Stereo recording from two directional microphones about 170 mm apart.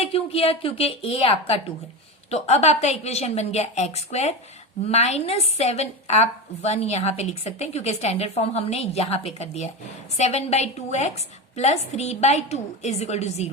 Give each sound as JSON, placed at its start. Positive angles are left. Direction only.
{"t": 0.0, "sound": "a woman's voice", "side_deg": 35}